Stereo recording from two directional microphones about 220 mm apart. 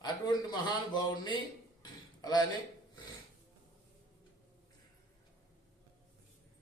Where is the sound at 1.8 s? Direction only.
20° left (ahead or behind).